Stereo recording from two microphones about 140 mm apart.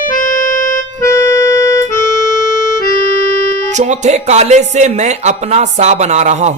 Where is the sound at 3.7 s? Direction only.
60° right (ahead or behind).